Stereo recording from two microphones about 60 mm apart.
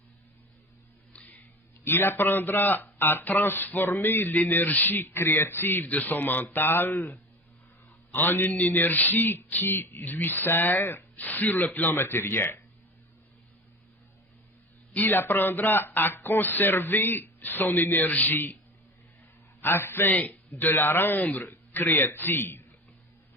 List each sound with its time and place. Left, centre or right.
1.1 s tick-tock: left
1.8 s a man's voice: left
14.9 s a man's voice: left
19.6 s a man's voice: left